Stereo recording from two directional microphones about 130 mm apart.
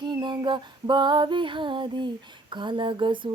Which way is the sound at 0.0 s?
35° right (ahead or behind).